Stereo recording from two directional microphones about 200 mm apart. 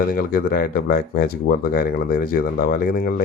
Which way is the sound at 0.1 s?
45° left (ahead or behind).